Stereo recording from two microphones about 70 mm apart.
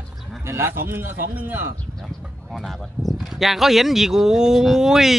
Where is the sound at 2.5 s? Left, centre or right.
Centre.